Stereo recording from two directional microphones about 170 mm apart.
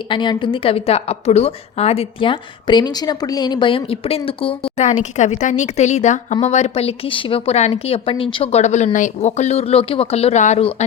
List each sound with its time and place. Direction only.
0.1 s a woman's voice: 30° left (ahead or behind)